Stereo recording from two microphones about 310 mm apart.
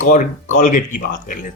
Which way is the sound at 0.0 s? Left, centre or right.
Left.